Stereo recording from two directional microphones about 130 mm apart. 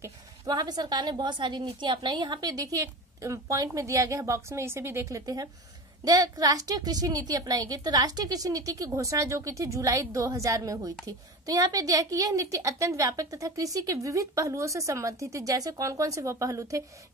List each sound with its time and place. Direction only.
0.0 s a woman's voice: 30° right (ahead or behind)